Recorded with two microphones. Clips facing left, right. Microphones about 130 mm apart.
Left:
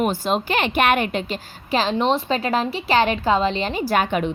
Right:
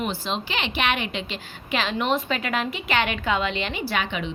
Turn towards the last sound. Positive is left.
turn(degrees=45)  # may be behind; listen again after turning